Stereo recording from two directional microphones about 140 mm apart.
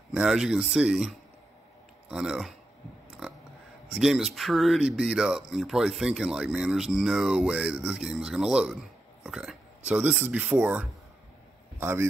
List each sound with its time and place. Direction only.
0.1 s speech: 5° right (ahead or behind)
3.9 s speech: centre (ahead or behind)
9.2 s a sound: centre (ahead or behind)
9.8 s speech: 10° right (ahead or behind)